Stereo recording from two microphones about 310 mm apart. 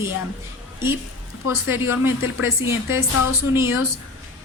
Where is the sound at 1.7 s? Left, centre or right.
Centre.